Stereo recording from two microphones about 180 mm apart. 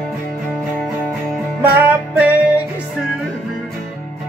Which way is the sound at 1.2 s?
5° right (ahead or behind).